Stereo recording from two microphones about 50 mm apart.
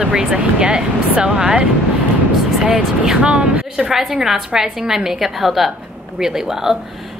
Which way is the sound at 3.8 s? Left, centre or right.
Centre.